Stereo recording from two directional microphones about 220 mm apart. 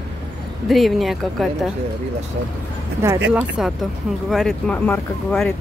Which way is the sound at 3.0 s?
10° right (ahead or behind).